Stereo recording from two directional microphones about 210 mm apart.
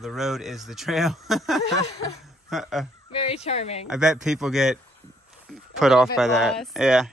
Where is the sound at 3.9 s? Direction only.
5° right (ahead or behind).